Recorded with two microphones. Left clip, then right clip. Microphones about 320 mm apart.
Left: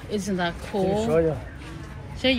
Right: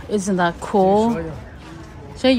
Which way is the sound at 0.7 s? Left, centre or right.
Right.